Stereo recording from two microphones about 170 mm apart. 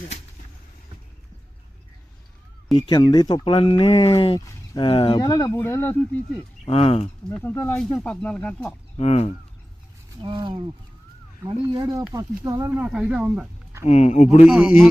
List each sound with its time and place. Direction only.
2.7 s speech: 30° left (ahead or behind); by 6.1 s 10° left (ahead or behind)
6.7 s speech: 35° left (ahead or behind)
7.3 s speech: 10° left (ahead or behind)
9.0 s speech: 40° left (ahead or behind)
10.2 s speech: 25° right (ahead or behind)
11.8 s speech: 20° right (ahead or behind)
13.8 s speech: 40° left (ahead or behind)
14.4 s speech: 5° right (ahead or behind)